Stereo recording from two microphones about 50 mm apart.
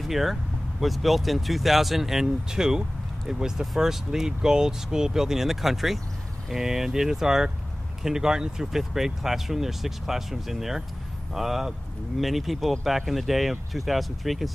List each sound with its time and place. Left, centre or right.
0.0 s speech: centre